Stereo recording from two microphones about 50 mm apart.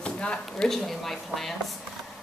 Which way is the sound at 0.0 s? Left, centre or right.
Left.